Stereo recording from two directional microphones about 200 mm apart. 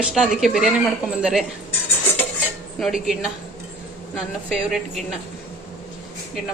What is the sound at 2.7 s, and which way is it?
Speech, centre (ahead or behind).